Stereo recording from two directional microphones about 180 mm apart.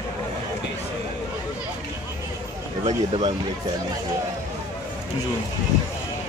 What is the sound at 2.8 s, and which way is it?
Speech, 30° right (ahead or behind).